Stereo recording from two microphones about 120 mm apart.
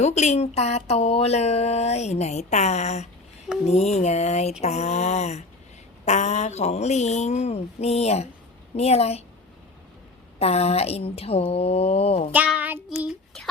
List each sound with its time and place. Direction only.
0.0 s speech: 70° left (ahead or behind)
10.4 s speech: 60° left (ahead or behind)
12.3 s child singing: 15° right (ahead or behind)